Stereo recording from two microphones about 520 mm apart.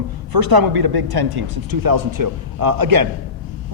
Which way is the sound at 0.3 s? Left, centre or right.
Right.